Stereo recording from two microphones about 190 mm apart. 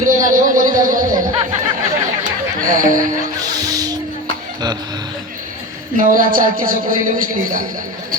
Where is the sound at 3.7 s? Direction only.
20° right (ahead or behind).